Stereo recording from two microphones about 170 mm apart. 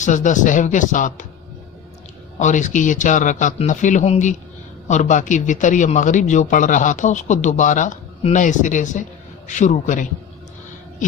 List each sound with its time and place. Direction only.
0.0 s a man's voice: 45° left (ahead or behind)
2.4 s a man's voice: 45° left (ahead or behind)